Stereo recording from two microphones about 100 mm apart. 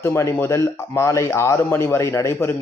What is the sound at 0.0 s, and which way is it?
Speech, 25° left (ahead or behind).